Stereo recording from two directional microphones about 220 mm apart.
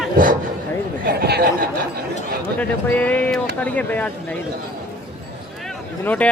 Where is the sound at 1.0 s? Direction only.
45° right (ahead or behind).